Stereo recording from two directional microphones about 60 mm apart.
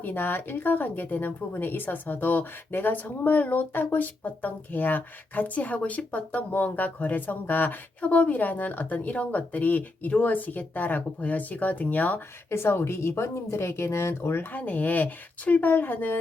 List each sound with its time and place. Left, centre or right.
0.0 s speech: left
12.5 s speech: left
14.5 s speech: left